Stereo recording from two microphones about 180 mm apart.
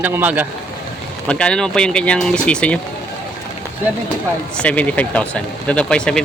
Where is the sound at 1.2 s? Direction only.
5° left (ahead or behind).